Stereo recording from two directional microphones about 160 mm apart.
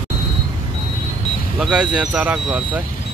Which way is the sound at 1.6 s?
5° right (ahead or behind).